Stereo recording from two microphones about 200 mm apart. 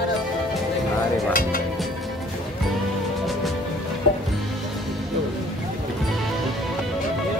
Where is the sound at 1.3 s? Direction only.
45° left (ahead or behind).